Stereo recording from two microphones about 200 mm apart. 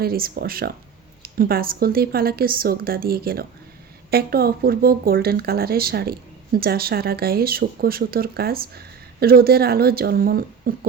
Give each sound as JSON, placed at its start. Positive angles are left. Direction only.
{"t": 0.0, "sound": "speech", "side_deg": -50}